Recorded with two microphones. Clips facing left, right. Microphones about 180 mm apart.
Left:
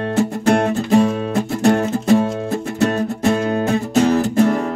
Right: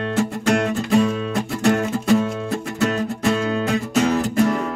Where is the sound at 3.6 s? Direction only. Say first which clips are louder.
Left 3 dB; 35° left (ahead or behind).